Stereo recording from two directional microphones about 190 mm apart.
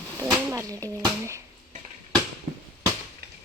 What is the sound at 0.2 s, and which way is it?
Speech, 15° right (ahead or behind).